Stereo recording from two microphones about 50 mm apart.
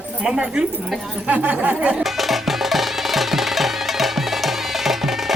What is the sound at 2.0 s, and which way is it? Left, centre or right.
Music, centre.